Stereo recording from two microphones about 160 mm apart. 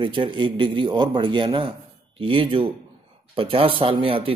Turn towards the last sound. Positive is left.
turn(degrees=-35)  # may be behind; listen again after turning